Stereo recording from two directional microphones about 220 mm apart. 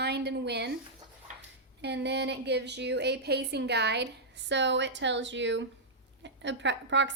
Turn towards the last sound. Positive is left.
turn(degrees=-55)  # may be behind; listen again after turning